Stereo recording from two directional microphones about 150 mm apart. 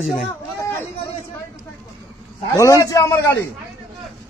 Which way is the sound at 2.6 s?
20° left (ahead or behind).